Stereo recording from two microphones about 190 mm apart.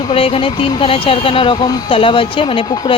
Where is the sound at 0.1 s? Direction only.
30° left (ahead or behind).